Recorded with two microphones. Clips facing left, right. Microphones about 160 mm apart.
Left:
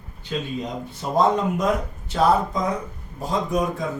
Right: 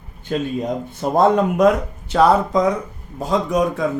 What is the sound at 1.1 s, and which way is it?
Speech, 65° right (ahead or behind).